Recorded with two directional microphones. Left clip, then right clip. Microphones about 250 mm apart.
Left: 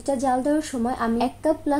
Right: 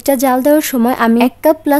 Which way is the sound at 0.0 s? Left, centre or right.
Right.